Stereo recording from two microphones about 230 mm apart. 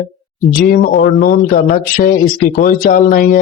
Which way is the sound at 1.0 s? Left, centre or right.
Left.